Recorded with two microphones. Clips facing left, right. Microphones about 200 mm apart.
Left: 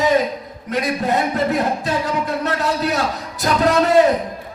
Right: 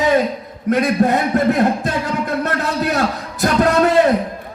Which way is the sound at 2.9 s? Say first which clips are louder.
Right 2 dB; 55° right (ahead or behind).